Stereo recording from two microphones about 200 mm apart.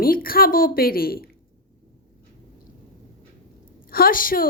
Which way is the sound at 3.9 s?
45° left (ahead or behind).